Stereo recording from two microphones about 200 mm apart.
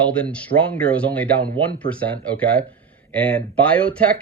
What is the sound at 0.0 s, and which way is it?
Speech, 5° left (ahead or behind).